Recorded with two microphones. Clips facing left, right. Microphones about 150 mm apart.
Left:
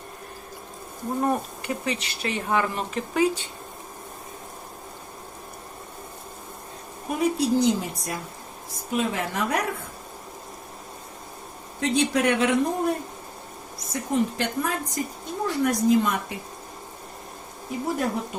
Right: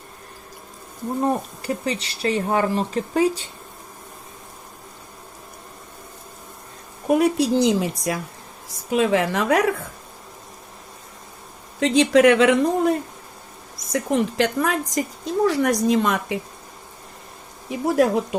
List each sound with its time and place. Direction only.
1.2 s speech: 35° right (ahead or behind)
7.1 s a woman's voice: 75° right (ahead or behind)
11.8 s a woman's voice: 90° right
17.7 s a woman's voice: 90° right